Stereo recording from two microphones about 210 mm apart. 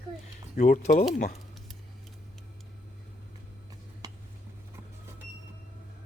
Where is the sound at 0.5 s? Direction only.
40° left (ahead or behind).